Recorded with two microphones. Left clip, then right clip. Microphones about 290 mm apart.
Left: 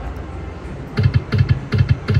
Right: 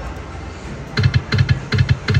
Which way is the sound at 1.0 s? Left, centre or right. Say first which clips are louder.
Right 3 dB; centre.